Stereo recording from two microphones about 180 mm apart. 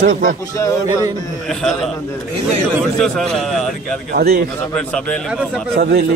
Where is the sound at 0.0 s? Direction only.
55° right (ahead or behind).